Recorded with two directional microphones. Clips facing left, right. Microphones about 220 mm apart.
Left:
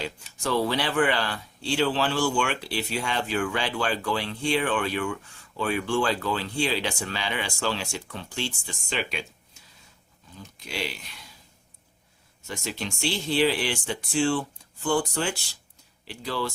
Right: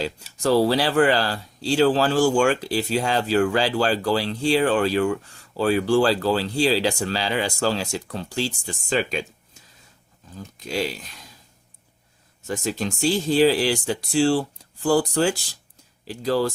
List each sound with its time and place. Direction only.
0.0 s speech: 35° right (ahead or behind)
10.3 s speech: 40° right (ahead or behind)
12.5 s speech: 45° right (ahead or behind)